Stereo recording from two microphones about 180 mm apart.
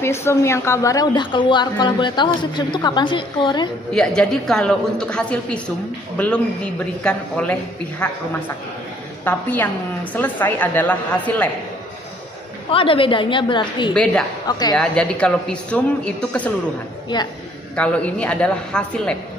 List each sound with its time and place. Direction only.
0.0 s a woman's voice: 15° left (ahead or behind)
3.9 s a man's voice: 5° left (ahead or behind)
9.2 s a woman's voice: 10° left (ahead or behind)
12.7 s a woman's voice: 30° left (ahead or behind)
14.8 s a woman's voice: 5° left (ahead or behind)
17.7 s a woman's voice: 5° left (ahead or behind)